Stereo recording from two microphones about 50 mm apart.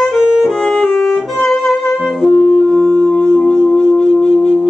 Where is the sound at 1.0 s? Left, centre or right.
Centre.